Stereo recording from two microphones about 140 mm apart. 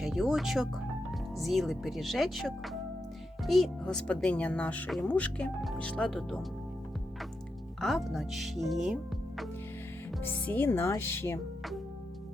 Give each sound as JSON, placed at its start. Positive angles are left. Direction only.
{"t": 0.0, "sound": "speech", "side_deg": 0}
{"t": 7.8, "sound": "speech", "side_deg": 0}
{"t": 10.4, "sound": "speech", "side_deg": 15}